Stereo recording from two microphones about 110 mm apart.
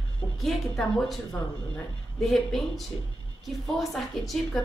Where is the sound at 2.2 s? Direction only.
Centre (ahead or behind).